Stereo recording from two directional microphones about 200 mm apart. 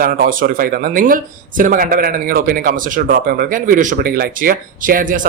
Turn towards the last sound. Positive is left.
turn(degrees=-40)  # may be behind; listen again after turning